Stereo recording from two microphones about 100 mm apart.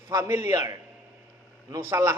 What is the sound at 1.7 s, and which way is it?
Speech, 30° right (ahead or behind).